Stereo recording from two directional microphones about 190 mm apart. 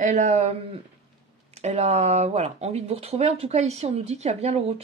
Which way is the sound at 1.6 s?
35° right (ahead or behind).